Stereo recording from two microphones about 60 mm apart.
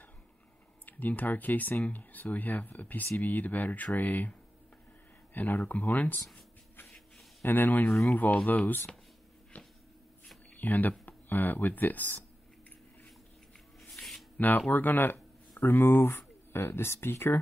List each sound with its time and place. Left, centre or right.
0.8 s speech: left
5.3 s speech: left
7.4 s speech: left
10.6 s speech: left
13.7 s a sound: centre
14.3 s a sound: left
14.7 s speech: left